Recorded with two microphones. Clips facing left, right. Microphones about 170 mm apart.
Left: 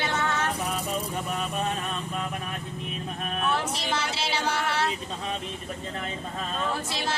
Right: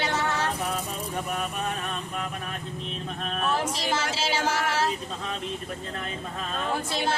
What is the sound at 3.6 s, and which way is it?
Speech, 45° right (ahead or behind).